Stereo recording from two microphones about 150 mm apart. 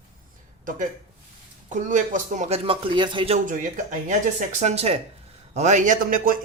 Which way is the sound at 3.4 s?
60° right (ahead or behind).